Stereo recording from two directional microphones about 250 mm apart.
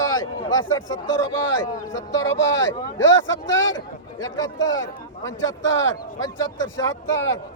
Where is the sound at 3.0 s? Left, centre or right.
Left.